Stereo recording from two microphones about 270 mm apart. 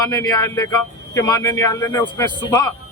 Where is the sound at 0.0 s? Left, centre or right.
Centre.